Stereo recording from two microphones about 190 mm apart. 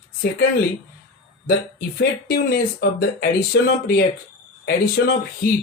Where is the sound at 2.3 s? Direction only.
50° left (ahead or behind).